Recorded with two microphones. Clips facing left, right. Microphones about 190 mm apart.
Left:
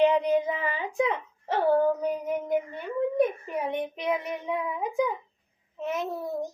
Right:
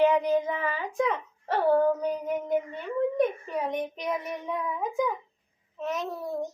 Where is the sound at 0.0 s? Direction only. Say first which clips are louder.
Left 1 dB; 20° left (ahead or behind).